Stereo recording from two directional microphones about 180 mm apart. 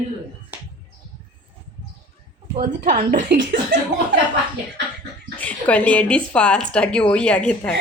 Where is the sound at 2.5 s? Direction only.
45° right (ahead or behind).